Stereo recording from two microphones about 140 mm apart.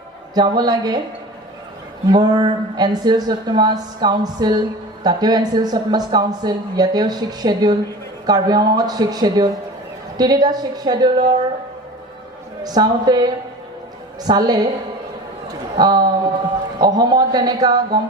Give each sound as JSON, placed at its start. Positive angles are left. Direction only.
{"t": 0.3, "sound": "speech", "side_deg": -30}
{"t": 2.1, "sound": "speech", "side_deg": -30}
{"t": 12.6, "sound": "speech", "side_deg": -30}
{"t": 14.3, "sound": "speech", "side_deg": -30}
{"t": 15.8, "sound": "speech", "side_deg": -30}